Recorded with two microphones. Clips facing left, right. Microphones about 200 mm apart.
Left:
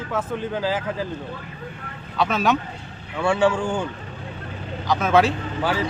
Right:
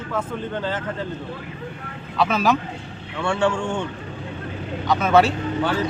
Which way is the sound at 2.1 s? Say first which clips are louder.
Right 1 dB; centre (ahead or behind).